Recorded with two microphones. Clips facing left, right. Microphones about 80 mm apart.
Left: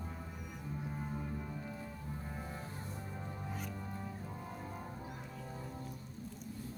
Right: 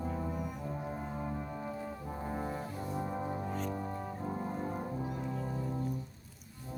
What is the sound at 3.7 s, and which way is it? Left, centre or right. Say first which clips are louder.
Music: right 7 dB; right.